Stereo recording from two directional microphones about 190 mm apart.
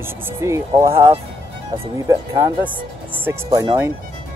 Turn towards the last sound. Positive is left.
turn(degrees=-20)  # may be behind; listen again after turning